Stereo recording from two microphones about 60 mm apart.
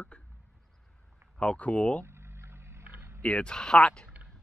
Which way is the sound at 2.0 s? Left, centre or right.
Right.